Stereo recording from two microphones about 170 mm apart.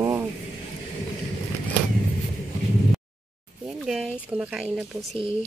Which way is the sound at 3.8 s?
Centre (ahead or behind).